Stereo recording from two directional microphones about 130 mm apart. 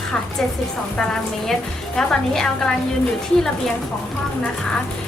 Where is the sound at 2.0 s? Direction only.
5° left (ahead or behind).